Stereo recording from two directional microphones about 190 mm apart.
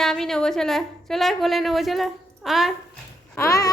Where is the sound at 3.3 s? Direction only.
15° left (ahead or behind).